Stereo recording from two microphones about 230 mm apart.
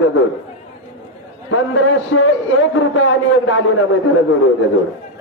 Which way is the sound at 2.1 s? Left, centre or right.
Left.